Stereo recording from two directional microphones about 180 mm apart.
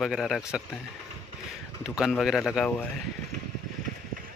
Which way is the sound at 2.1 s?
Centre (ahead or behind).